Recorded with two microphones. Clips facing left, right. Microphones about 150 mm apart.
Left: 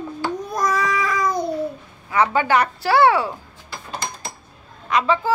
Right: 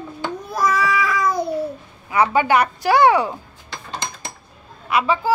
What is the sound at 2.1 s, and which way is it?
A child's voice, 15° right (ahead or behind).